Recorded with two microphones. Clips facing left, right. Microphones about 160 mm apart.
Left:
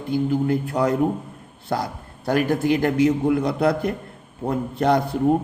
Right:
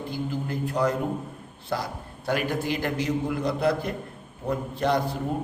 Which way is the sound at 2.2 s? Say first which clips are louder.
Left 7 dB; 45° left (ahead or behind).